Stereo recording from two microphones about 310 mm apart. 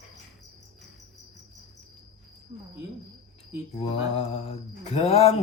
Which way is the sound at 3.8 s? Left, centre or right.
Centre.